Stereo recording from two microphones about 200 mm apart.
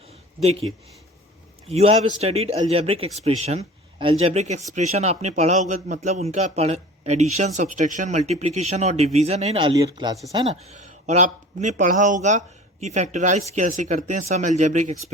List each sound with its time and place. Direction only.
1.6 s speech: 30° right (ahead or behind)
10.3 s speech: 30° right (ahead or behind)